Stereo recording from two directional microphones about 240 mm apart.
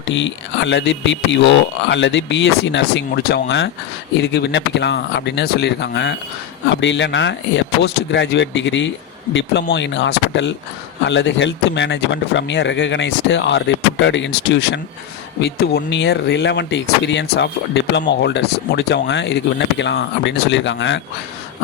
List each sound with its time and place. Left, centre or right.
0.0 s speech: left